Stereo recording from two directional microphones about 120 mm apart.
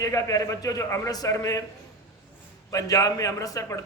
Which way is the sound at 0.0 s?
30° left (ahead or behind).